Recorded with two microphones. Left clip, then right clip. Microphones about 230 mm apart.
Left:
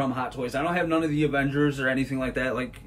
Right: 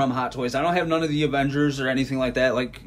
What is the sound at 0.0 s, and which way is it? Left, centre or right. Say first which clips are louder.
A man's voice: right 4 dB; right.